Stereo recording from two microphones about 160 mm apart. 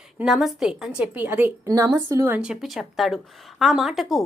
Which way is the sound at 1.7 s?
25° right (ahead or behind).